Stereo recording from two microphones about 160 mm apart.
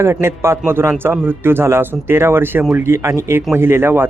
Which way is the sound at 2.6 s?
5° right (ahead or behind).